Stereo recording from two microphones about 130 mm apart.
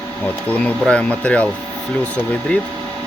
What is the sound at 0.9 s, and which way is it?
Speech, 10° left (ahead or behind).